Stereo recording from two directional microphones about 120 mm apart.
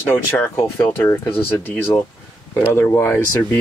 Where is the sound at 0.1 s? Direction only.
20° left (ahead or behind).